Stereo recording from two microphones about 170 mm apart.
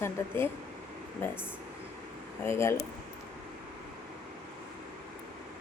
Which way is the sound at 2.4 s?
15° left (ahead or behind).